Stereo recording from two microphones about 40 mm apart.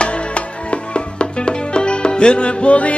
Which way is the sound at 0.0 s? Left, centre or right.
Left.